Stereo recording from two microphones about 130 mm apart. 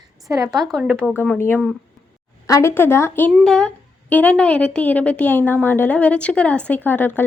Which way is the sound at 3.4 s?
5° left (ahead or behind).